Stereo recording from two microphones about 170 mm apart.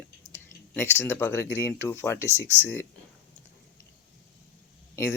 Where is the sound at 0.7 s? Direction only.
10° left (ahead or behind).